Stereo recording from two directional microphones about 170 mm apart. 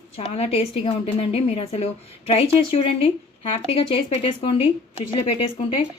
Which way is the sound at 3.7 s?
30° left (ahead or behind).